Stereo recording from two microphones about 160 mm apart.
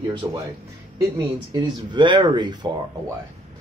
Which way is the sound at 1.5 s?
30° right (ahead or behind).